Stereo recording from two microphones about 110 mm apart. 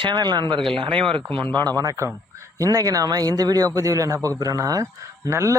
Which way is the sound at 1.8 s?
30° right (ahead or behind).